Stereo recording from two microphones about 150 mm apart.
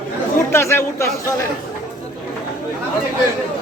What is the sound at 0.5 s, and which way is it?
Speech, 15° left (ahead or behind).